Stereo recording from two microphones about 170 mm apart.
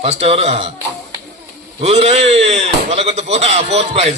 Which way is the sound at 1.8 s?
40° right (ahead or behind).